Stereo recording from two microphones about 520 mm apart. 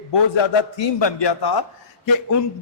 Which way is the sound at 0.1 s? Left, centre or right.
Left.